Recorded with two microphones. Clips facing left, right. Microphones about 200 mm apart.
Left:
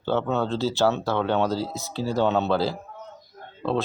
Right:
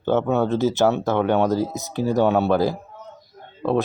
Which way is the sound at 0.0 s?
15° right (ahead or behind).